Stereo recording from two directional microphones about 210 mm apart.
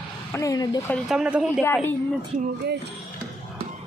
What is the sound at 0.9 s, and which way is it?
Speech, centre (ahead or behind).